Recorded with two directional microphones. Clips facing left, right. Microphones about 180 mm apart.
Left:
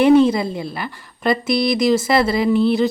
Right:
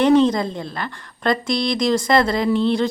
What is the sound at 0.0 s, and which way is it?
A woman's voice, 10° left (ahead or behind).